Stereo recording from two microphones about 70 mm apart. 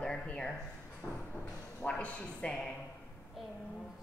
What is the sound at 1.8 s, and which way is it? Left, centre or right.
Speech, centre.